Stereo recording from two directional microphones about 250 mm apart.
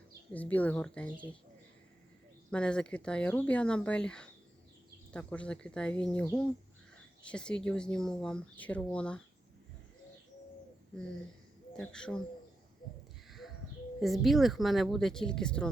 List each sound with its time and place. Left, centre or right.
0.3 s speech: centre
2.5 s speech: centre
11.8 s speech: centre
14.0 s speech: centre